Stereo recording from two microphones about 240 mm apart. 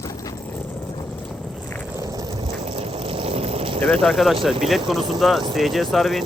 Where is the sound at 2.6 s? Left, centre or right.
Right.